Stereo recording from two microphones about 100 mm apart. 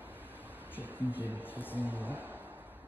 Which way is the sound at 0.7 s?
20° left (ahead or behind).